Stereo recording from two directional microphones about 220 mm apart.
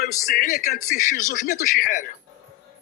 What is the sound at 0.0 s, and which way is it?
A man's voice, 35° left (ahead or behind).